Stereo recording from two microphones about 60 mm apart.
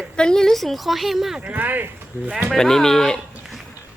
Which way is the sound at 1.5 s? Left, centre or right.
Right.